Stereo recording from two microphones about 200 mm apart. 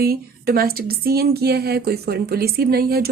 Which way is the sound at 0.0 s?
50° right (ahead or behind).